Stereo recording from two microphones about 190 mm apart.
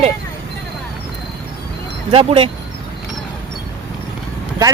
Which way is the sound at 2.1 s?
30° right (ahead or behind).